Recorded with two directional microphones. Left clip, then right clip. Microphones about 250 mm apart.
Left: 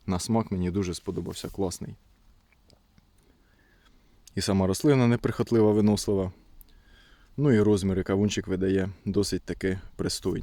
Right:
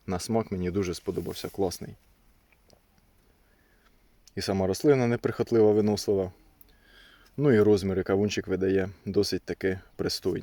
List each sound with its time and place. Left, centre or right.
0.0 s speech: centre
4.3 s speech: centre
6.9 s speech: centre